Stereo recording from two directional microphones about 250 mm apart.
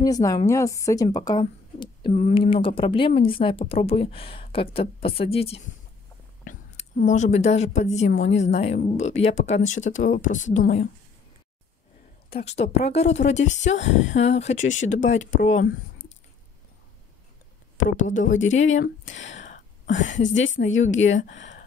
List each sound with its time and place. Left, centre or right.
0.0 s a woman's voice: centre
12.3 s a woman's voice: left
18.0 s a woman's voice: left
18.5 s a sound: left
20.1 s speech: left
21.1 s a woman's voice: left